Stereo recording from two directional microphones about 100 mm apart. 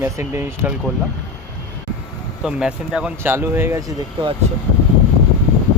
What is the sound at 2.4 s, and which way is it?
Speech, 10° right (ahead or behind).